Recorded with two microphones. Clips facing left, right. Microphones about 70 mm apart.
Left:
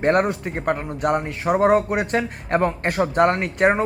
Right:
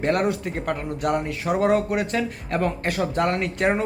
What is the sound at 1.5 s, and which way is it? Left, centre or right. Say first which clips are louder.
Speech: left 3 dB; left.